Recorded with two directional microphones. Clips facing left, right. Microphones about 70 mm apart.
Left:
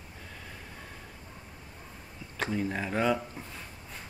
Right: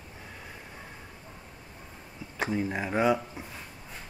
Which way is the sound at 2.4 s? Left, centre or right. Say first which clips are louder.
Right 2 dB; centre.